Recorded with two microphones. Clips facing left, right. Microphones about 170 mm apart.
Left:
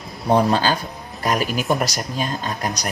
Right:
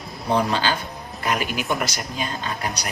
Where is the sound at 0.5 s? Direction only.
40° left (ahead or behind).